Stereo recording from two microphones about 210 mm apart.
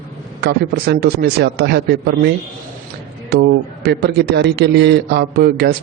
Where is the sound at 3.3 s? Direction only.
50° right (ahead or behind).